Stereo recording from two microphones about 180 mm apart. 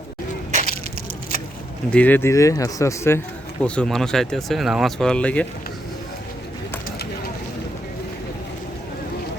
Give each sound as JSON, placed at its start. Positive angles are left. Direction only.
{"t": 1.9, "sound": "speech", "side_deg": 10}
{"t": 3.6, "sound": "speech", "side_deg": 5}